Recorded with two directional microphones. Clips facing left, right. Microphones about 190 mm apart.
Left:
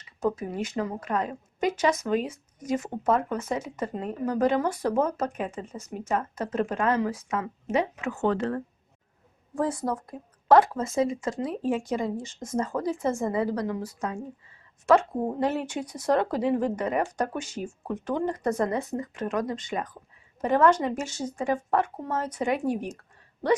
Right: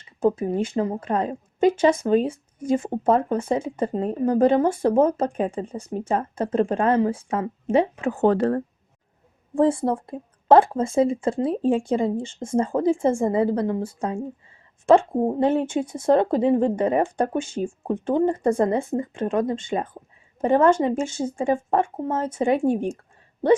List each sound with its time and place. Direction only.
0.0 s a woman's voice: 30° right (ahead or behind)
9.6 s a woman's voice: 30° right (ahead or behind)